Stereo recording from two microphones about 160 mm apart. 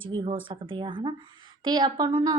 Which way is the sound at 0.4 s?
30° right (ahead or behind).